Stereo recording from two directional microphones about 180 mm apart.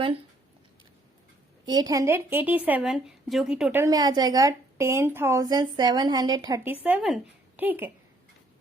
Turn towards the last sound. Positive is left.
turn(degrees=-10)  # may be behind; listen again after turning